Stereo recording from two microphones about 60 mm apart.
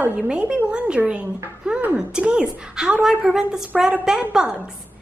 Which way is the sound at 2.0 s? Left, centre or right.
Centre.